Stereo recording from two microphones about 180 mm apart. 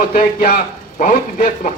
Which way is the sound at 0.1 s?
55° left (ahead or behind).